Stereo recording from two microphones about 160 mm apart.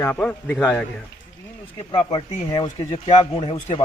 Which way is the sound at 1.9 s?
30° left (ahead or behind).